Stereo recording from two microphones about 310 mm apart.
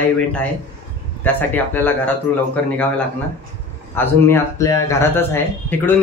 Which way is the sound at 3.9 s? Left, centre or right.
Centre.